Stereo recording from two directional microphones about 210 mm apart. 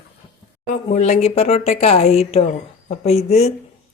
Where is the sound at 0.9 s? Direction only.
30° left (ahead or behind).